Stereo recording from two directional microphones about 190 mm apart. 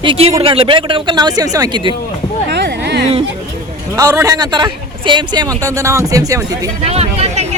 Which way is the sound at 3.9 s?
15° right (ahead or behind).